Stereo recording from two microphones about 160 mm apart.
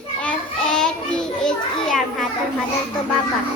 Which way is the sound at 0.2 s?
5° left (ahead or behind).